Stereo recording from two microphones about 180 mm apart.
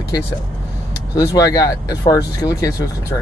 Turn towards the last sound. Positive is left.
turn(degrees=15)  # may be behind; listen again after turning